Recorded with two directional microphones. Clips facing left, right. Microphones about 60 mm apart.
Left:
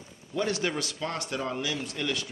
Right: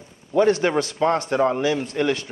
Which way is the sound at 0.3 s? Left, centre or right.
Right.